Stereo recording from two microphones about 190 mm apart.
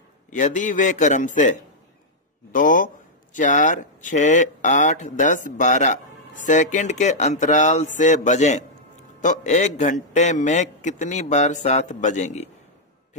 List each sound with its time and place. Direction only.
0.3 s speech: 40° left (ahead or behind)